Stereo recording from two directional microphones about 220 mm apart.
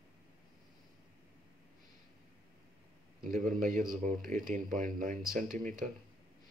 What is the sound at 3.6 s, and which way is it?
Speech, 35° right (ahead or behind).